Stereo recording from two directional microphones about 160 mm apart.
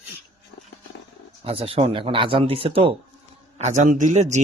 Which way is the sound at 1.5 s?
35° right (ahead or behind).